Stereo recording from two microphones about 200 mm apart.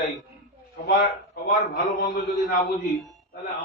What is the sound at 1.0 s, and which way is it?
A man's voice, 40° left (ahead or behind).